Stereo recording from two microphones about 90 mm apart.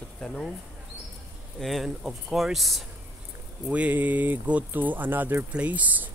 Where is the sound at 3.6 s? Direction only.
15° right (ahead or behind).